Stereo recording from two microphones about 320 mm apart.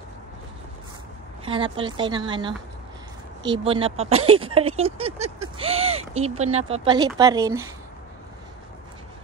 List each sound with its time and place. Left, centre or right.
1.4 s speech: centre